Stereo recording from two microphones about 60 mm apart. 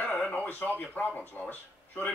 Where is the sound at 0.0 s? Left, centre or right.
Left.